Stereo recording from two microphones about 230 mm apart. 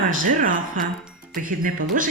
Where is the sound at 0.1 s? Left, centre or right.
Right.